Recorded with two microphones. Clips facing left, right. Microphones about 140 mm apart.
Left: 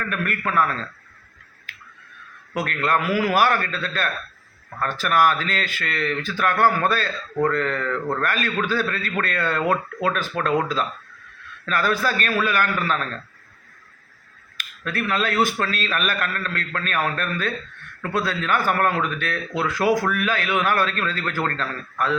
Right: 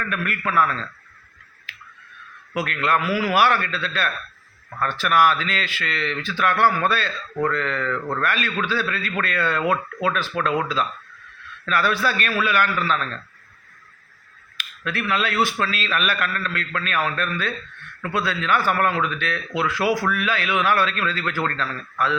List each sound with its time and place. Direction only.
0.0 s speech: 45° left (ahead or behind)
2.6 s speech: 45° left (ahead or behind)
11.6 s speech: 40° left (ahead or behind)
14.6 s speech: 45° left (ahead or behind)